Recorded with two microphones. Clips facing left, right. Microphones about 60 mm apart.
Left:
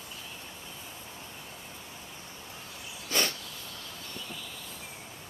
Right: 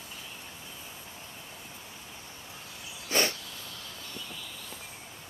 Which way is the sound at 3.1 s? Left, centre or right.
Right.